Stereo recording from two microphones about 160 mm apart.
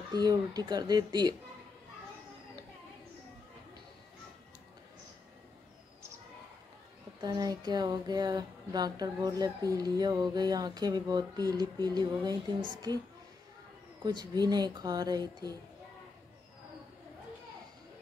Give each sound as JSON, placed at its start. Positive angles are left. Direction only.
{"t": 0.1, "sound": "speech", "side_deg": -25}
{"t": 7.2, "sound": "speech", "side_deg": -25}
{"t": 14.0, "sound": "speech", "side_deg": -25}